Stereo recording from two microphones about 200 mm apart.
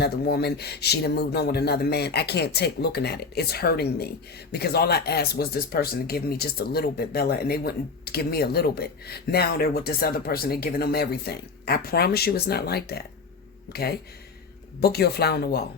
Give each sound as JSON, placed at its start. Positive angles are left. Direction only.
{"t": 0.0, "sound": "speech", "side_deg": 55}